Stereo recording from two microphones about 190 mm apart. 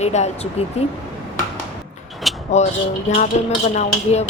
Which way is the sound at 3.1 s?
35° left (ahead or behind).